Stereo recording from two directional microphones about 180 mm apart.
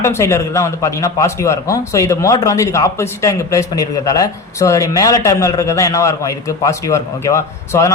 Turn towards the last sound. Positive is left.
turn(degrees=15)  # may be behind; listen again after turning